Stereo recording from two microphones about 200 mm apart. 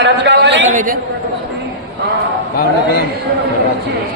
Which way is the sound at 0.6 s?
40° right (ahead or behind).